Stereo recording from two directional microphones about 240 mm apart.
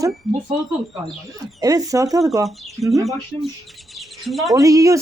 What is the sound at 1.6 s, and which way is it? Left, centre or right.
Speech, centre.